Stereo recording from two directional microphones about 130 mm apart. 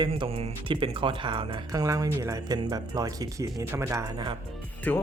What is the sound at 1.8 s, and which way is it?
Speech, 25° right (ahead or behind).